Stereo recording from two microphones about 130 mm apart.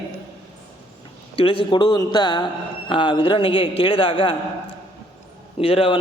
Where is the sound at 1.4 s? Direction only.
40° left (ahead or behind).